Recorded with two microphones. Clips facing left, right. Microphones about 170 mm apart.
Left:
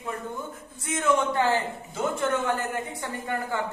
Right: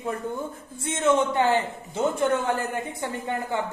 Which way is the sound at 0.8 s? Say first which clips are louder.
Right 2 dB; 25° right (ahead or behind).